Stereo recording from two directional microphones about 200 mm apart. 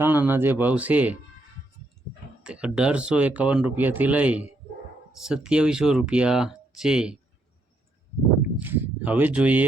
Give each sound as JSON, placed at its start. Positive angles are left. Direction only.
{"t": 0.0, "sound": "speech", "side_deg": -10}
{"t": 2.4, "sound": "speech", "side_deg": -5}
{"t": 8.5, "sound": "speech", "side_deg": -10}